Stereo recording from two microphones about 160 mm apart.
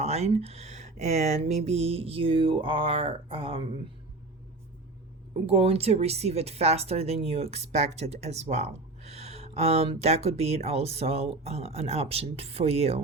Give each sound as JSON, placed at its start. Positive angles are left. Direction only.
{"t": 0.0, "sound": "speech", "side_deg": -40}
{"t": 5.5, "sound": "speech", "side_deg": -40}